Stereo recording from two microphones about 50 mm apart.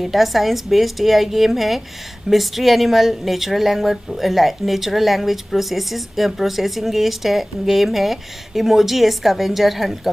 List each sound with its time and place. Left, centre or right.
0.0 s speech: centre